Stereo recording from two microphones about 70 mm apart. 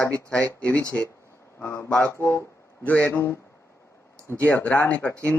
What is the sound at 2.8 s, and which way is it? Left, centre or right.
Speech, centre.